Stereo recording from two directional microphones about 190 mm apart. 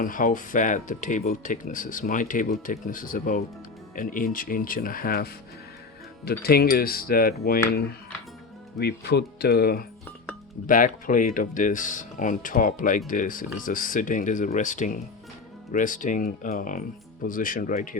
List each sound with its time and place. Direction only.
0.0 s speech: 45° left (ahead or behind)
8.8 s speech: 60° left (ahead or behind)